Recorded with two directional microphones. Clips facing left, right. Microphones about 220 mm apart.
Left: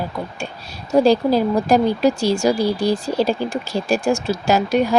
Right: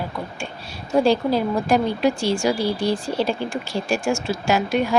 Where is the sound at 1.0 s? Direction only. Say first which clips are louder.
Left 4 dB; 40° left (ahead or behind).